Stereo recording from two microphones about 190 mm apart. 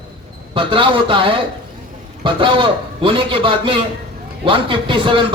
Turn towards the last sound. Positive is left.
turn(degrees=-25)  # may be behind; listen again after turning